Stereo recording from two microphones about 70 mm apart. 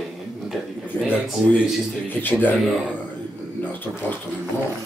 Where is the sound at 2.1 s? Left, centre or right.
Left.